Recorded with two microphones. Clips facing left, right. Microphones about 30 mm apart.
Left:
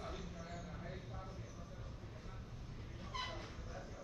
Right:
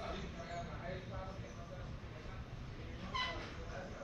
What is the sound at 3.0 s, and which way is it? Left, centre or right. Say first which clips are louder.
Vehicle: right 5 dB; right.